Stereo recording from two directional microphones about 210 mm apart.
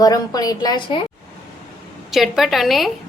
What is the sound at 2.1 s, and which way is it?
Speech, centre (ahead or behind).